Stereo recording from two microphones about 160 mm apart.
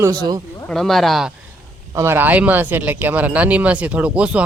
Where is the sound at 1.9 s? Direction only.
15° right (ahead or behind).